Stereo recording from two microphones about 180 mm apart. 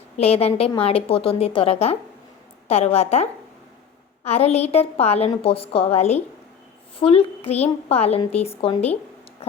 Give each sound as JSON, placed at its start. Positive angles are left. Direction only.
{"t": 0.2, "sound": "a woman's voice", "side_deg": 35}